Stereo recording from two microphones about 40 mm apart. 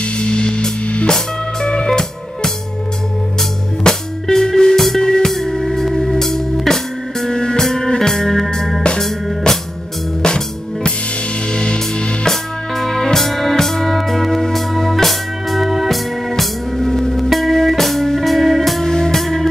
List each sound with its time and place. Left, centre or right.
0.0 s music: left
3.8 s music: centre
5.3 s music: centre
10.2 s music: centre
12.3 s music: centre
16.8 s music: centre